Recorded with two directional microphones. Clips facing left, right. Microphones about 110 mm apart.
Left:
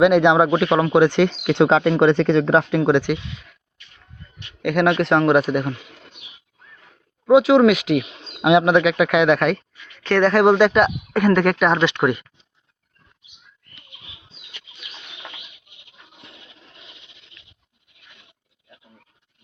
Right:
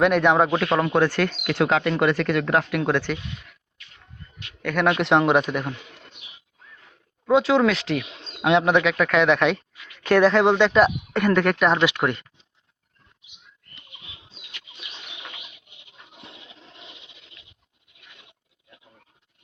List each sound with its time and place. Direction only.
0.0 s speech: 15° left (ahead or behind)
4.6 s speech: 10° left (ahead or behind)
4.9 s speech: centre (ahead or behind)
7.3 s speech: 10° left (ahead or behind)
10.0 s speech: 10° right (ahead or behind)
10.3 s speech: 10° left (ahead or behind)